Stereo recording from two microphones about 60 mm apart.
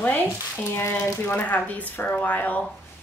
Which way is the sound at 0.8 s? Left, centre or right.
Left.